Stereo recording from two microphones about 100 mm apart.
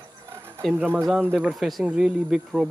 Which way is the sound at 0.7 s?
20° right (ahead or behind).